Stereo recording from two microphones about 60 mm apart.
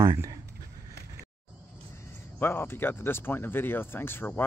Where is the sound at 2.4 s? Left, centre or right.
Left.